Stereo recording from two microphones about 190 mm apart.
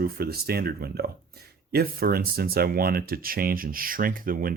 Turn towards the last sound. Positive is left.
turn(degrees=-50)  # may be behind; listen again after turning